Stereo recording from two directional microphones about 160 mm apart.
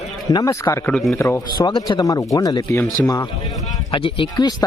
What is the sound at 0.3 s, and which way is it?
A man's voice, 20° left (ahead or behind).